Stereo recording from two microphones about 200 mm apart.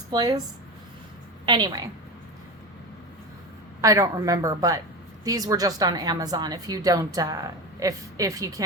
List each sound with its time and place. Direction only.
0.1 s a woman's voice: 20° right (ahead or behind)
1.5 s a woman's voice: 20° right (ahead or behind)
3.8 s a woman's voice: 15° right (ahead or behind)